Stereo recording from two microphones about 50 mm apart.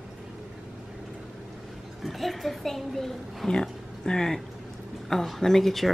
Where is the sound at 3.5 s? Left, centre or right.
Centre.